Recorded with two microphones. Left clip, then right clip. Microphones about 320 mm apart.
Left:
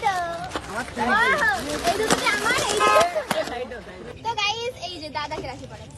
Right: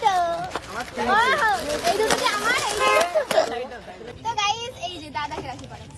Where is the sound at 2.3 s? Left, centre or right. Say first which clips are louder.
Left 1 dB; centre.